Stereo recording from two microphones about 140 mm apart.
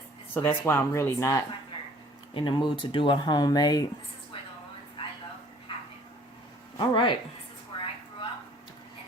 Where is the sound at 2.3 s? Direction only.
35° left (ahead or behind).